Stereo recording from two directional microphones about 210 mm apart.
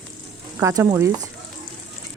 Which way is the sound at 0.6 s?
15° right (ahead or behind).